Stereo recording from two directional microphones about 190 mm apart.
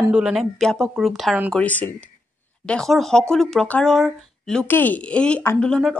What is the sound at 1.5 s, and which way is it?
A woman's voice, 10° left (ahead or behind).